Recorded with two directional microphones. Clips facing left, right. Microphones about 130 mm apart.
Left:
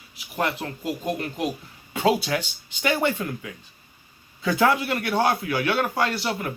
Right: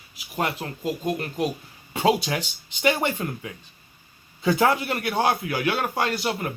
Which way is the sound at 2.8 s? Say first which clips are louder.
Even; 25° right (ahead or behind).